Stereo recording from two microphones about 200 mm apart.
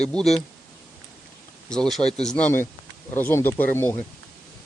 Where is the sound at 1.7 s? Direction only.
5° left (ahead or behind).